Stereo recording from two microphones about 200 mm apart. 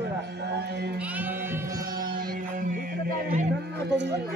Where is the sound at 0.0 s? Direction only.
60° right (ahead or behind).